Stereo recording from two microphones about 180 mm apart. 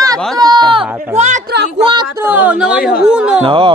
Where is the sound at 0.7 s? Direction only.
40° right (ahead or behind).